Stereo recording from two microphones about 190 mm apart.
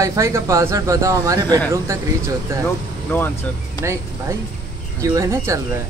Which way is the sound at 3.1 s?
10° left (ahead or behind).